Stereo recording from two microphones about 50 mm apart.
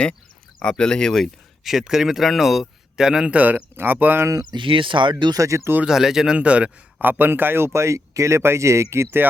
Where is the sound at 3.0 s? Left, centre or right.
Centre.